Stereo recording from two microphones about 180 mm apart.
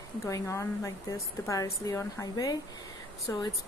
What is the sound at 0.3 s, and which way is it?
A woman's voice, 15° left (ahead or behind).